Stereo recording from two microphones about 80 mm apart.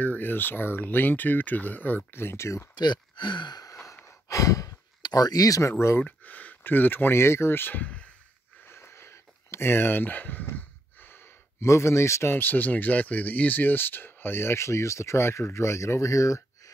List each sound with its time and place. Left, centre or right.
0.0 s speech: left
2.7 s speech: left
3.6 s sigh: left
5.0 s speech: left
6.0 s speech: centre
8.6 s speech: left